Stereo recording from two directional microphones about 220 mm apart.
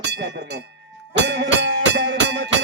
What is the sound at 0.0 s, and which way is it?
Speech, 50° right (ahead or behind).